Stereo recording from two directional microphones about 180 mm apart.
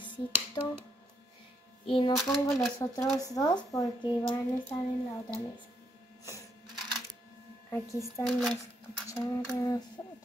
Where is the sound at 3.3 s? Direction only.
20° left (ahead or behind).